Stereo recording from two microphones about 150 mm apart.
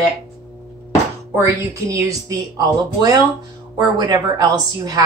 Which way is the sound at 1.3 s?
20° right (ahead or behind).